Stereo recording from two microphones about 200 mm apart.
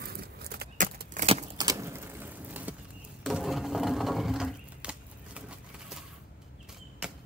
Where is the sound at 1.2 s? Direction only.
25° right (ahead or behind); by 2.7 s 10° right (ahead or behind).